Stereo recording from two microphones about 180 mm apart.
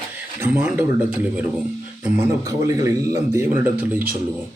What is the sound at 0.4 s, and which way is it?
Speech, 10° right (ahead or behind).